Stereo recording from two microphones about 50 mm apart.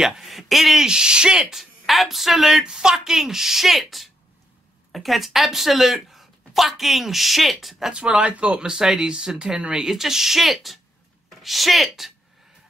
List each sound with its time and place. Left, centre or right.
0.0 s speech: centre
0.8 s speech: centre
1.6 s speech: centre
7.9 s speech: right; by 12.1 s centre